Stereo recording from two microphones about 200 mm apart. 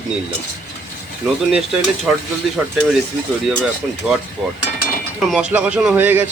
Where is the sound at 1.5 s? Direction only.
5° right (ahead or behind).